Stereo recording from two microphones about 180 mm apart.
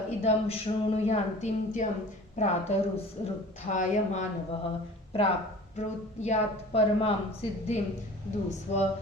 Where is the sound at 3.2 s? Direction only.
40° left (ahead or behind).